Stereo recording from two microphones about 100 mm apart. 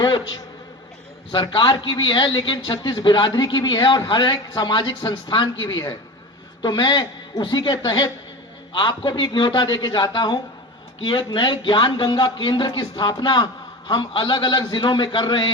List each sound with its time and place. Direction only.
1.3 s a man's voice: 50° left (ahead or behind)
6.6 s a man's voice: 45° left (ahead or behind)